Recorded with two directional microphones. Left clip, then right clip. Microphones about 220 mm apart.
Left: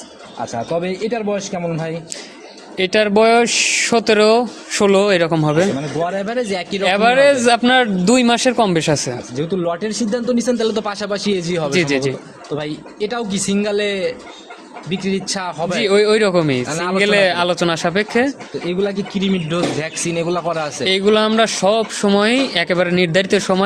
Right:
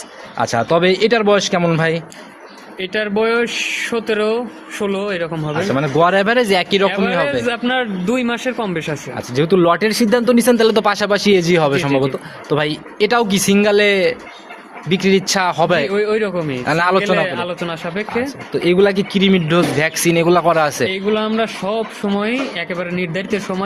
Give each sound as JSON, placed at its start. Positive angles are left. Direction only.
{"t": 0.3, "sound": "a man's voice", "side_deg": -45}
{"t": 2.7, "sound": "speech", "side_deg": 45}
{"t": 6.0, "sound": "speech", "side_deg": -40}
{"t": 6.8, "sound": "speech", "side_deg": 50}
{"t": 9.3, "sound": "speech", "side_deg": -40}
{"t": 15.9, "sound": "speech", "side_deg": 50}
{"t": 16.6, "sound": "speech", "side_deg": -35}
{"t": 17.0, "sound": "speech", "side_deg": 50}
{"t": 18.6, "sound": "speech", "side_deg": -35}
{"t": 20.9, "sound": "speech", "side_deg": 50}